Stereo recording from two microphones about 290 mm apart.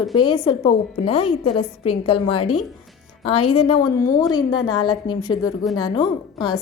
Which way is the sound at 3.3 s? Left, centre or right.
Left.